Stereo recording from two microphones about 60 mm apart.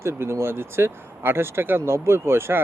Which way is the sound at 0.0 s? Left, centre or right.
Right.